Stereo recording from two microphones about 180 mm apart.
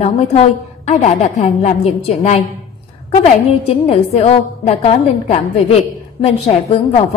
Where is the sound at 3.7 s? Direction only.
35° left (ahead or behind).